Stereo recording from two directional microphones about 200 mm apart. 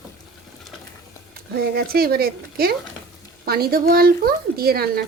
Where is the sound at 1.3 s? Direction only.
50° right (ahead or behind).